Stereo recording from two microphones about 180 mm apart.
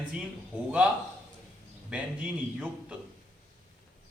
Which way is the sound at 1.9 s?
5° right (ahead or behind).